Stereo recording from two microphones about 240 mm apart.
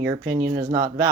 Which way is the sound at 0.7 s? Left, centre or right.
Centre.